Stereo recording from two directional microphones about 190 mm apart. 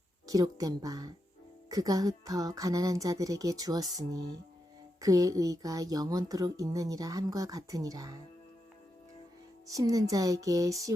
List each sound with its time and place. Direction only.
0.3 s speech: 20° right (ahead or behind)
9.7 s speech: 20° right (ahead or behind)